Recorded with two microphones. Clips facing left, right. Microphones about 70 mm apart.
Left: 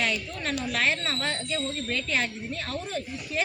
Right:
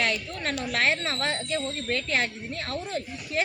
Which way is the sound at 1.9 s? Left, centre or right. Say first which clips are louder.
Right 3 dB; right.